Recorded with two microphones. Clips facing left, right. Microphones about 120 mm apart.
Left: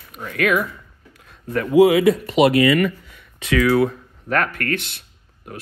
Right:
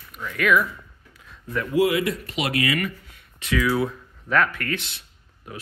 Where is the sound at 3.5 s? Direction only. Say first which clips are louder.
Left 6 dB; 65° left (ahead or behind).